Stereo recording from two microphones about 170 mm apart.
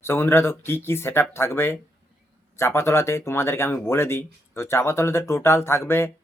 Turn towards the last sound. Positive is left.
turn(degrees=15)  # may be behind; listen again after turning